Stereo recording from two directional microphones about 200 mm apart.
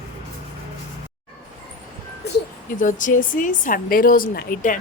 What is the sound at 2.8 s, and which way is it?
Speech, 40° left (ahead or behind).